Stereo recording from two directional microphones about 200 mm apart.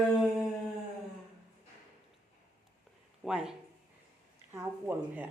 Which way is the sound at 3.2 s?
5° right (ahead or behind).